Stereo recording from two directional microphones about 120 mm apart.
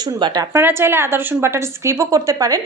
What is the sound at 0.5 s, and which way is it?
A woman's voice, 20° right (ahead or behind).